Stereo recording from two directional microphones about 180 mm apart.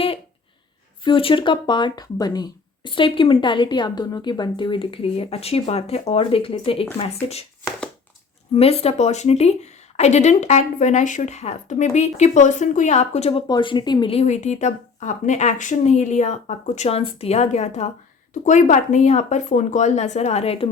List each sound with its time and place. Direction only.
1.0 s a woman's voice: 30° left (ahead or behind)
8.5 s a woman's voice: 35° left (ahead or behind)
13.5 s a woman's voice: 25° left (ahead or behind)